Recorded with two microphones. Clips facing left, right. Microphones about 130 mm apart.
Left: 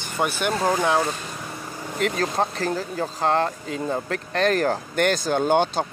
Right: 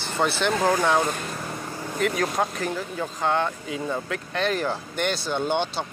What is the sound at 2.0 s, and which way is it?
Speech, 35° left (ahead or behind).